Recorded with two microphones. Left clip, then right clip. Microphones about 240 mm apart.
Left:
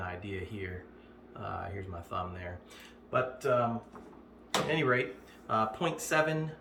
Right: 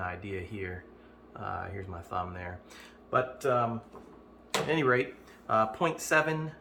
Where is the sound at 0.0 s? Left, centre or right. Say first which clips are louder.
Right 3 dB; centre.